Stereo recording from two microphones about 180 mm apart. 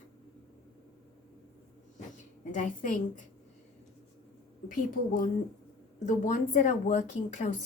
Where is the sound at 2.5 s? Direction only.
45° left (ahead or behind).